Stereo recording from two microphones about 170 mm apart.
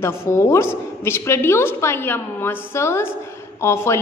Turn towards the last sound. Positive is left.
turn(degrees=15)  # may be behind; listen again after turning